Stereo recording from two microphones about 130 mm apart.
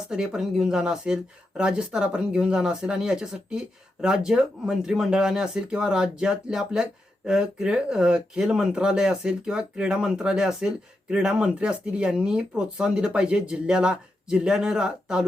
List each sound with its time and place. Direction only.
0.1 s speech: 5° right (ahead or behind)